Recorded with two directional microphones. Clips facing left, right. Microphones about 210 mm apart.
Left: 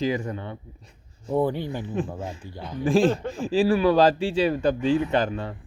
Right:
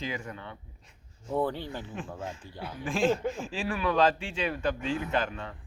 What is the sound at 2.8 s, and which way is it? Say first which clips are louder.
Speech: left 6 dB; 35° left (ahead or behind).